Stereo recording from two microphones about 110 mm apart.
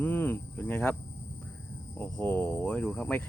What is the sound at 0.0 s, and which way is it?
Cricket, 15° left (ahead or behind).